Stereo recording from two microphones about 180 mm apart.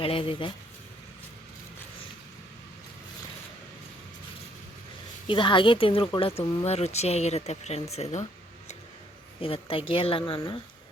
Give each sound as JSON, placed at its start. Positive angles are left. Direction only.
{"t": 0.0, "sound": "speech", "side_deg": 30}
{"t": 5.3, "sound": "speech", "side_deg": 25}
{"t": 9.4, "sound": "a woman's voice", "side_deg": 30}